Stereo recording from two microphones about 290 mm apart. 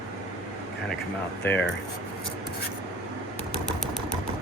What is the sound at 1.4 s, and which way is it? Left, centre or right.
Speech, centre.